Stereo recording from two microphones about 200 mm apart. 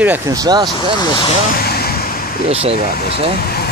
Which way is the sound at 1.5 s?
50° left (ahead or behind).